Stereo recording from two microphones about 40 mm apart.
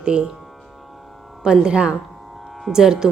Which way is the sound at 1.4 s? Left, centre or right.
Right.